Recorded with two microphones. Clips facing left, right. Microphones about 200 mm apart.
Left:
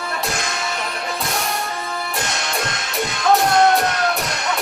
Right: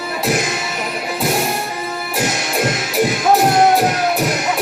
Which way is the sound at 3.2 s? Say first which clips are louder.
Right 1 dB; 5° right (ahead or behind).